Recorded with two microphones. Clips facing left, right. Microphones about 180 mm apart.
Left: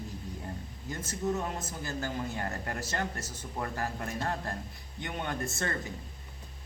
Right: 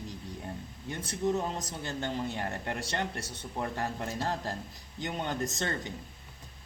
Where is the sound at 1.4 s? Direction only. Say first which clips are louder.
Right 1 dB; 35° right (ahead or behind).